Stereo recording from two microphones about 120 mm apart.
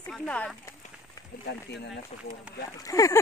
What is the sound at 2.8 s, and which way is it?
Speech, 30° left (ahead or behind).